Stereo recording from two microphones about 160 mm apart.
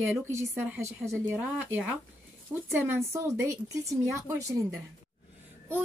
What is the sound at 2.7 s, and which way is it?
Speech, 15° right (ahead or behind).